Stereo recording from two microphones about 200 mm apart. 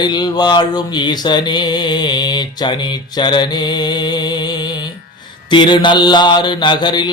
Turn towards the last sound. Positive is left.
turn(degrees=20)  # may be behind; listen again after turning